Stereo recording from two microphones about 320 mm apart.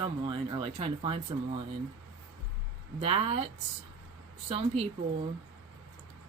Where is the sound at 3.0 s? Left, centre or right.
Centre.